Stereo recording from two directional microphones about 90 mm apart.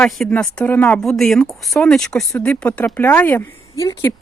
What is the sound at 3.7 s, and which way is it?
Speech, 35° left (ahead or behind).